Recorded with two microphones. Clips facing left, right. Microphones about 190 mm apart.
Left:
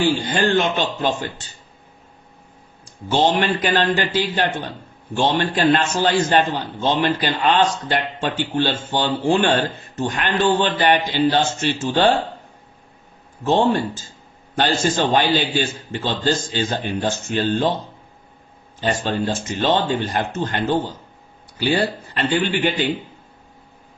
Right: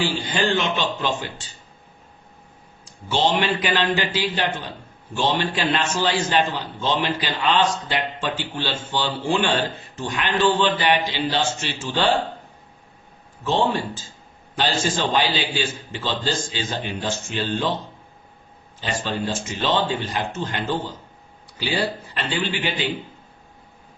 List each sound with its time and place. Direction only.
0.0 s speech: 45° left (ahead or behind)
3.1 s speech: 45° left (ahead or behind)
13.4 s speech: 50° left (ahead or behind)
18.8 s speech: 50° left (ahead or behind)
21.6 s speech: 50° left (ahead or behind)